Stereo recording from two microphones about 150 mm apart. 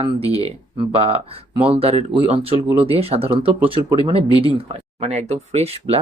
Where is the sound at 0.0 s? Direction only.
40° right (ahead or behind).